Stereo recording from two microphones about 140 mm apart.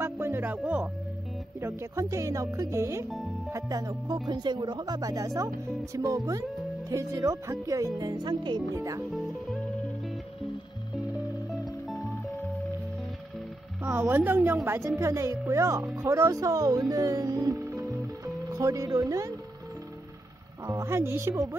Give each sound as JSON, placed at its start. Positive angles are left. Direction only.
{"t": 0.0, "sound": "music", "side_deg": -15}
{"t": 1.6, "sound": "speech", "side_deg": -20}
{"t": 13.8, "sound": "speech", "side_deg": -15}
{"t": 16.9, "sound": "music", "side_deg": -25}
{"t": 20.6, "sound": "speech", "side_deg": -20}